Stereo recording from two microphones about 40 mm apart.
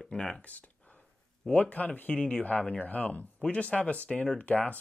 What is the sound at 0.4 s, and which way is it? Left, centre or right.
Speech, left.